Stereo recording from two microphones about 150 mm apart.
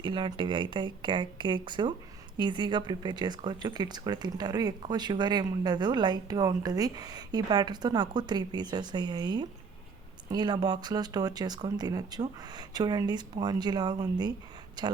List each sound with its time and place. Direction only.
0.0 s speech: 35° right (ahead or behind)